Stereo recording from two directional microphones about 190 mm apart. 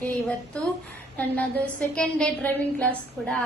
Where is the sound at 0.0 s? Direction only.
5° left (ahead or behind).